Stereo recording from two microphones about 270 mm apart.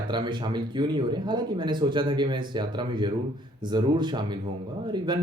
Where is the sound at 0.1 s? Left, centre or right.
Centre.